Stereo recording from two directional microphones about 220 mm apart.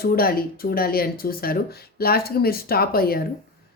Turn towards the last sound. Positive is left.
turn(degrees=45)  # may be behind; listen again after turning